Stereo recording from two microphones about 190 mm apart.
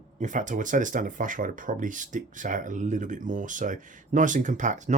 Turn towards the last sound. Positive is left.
turn(degrees=-40)  # may be behind; listen again after turning